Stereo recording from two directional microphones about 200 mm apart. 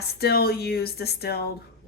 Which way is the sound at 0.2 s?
50° left (ahead or behind).